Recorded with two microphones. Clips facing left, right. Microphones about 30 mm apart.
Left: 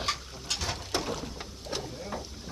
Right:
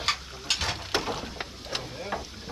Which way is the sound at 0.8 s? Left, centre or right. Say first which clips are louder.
Right 3 dB; right.